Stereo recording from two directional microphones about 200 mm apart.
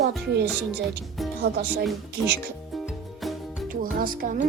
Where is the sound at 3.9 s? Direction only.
45° right (ahead or behind).